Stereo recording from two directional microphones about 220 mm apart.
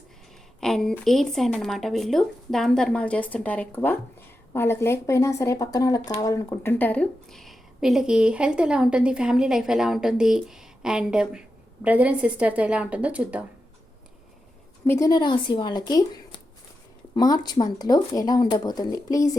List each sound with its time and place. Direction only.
0.6 s a woman's voice: centre (ahead or behind)
14.8 s speech: 15° left (ahead or behind)